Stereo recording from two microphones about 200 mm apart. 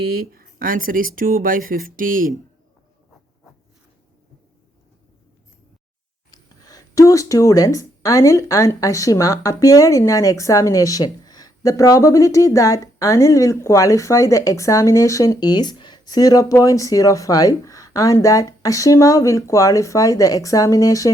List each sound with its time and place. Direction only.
0.0 s speech: 50° right (ahead or behind)
6.3 s speech: 20° left (ahead or behind)